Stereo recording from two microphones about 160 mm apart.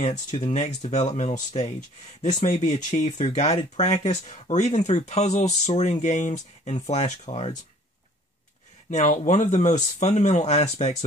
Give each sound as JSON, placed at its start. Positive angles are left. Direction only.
{"t": 0.0, "sound": "speech", "side_deg": 50}
{"t": 8.9, "sound": "speech", "side_deg": 50}